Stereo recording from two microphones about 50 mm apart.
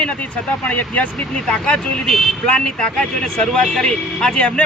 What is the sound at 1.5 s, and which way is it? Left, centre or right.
Speech, centre.